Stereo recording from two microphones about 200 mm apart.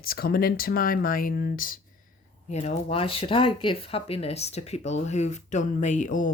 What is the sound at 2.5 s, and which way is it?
Speech, 35° left (ahead or behind).